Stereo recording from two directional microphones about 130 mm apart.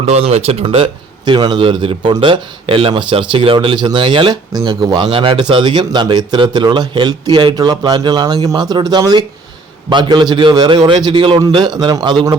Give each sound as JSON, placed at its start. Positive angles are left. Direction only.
{"t": 0.0, "sound": "speech", "side_deg": -50}